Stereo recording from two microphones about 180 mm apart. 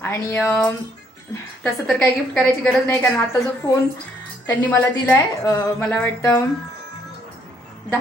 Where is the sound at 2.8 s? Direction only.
15° left (ahead or behind).